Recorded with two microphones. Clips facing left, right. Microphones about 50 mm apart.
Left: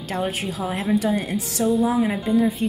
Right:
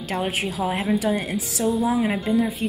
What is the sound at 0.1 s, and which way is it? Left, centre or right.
Speech, centre.